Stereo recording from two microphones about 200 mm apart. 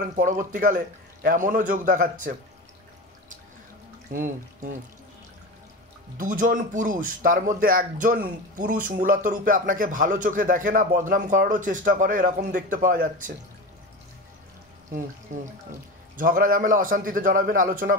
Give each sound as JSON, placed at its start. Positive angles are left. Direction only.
{"t": 0.1, "sound": "a man's voice", "side_deg": -40}
{"t": 4.1, "sound": "a man's voice", "side_deg": -40}
{"t": 6.1, "sound": "a man's voice", "side_deg": -40}
{"t": 15.3, "sound": "a man's voice", "side_deg": -40}